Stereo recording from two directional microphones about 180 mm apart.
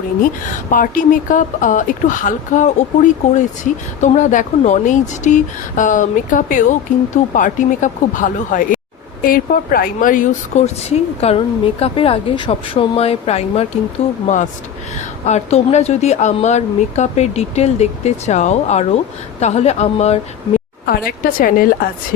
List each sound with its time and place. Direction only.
0.7 s speech: 45° left (ahead or behind)
15.3 s speech: 40° left (ahead or behind)
20.8 s speech: 55° left (ahead or behind)